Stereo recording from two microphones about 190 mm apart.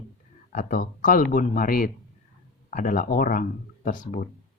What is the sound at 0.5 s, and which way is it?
Speech, 45° left (ahead or behind).